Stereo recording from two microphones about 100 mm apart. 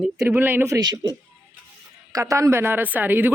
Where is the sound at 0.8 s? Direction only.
40° right (ahead or behind).